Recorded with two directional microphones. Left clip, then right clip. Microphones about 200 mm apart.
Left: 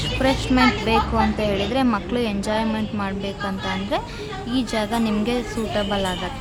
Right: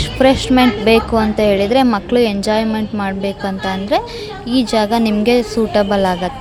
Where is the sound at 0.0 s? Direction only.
30° right (ahead or behind).